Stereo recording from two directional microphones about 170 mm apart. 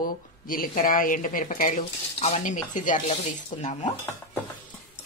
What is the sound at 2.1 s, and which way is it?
A woman's voice, 40° left (ahead or behind).